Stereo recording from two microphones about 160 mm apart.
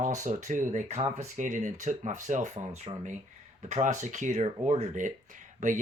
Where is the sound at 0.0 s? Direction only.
50° right (ahead or behind).